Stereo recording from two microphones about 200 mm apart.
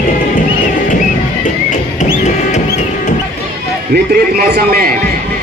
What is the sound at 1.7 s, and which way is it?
Music, 35° left (ahead or behind).